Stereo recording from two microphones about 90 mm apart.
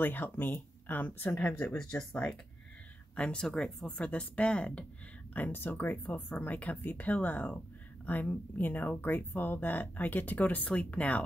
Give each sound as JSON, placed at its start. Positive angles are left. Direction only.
{"t": 0.0, "sound": "speech", "side_deg": 20}